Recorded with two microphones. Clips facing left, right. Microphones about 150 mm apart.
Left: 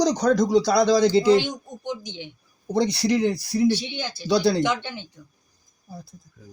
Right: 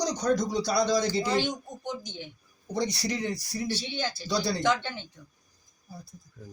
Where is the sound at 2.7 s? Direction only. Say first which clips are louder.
Left 9 dB; 65° left (ahead or behind).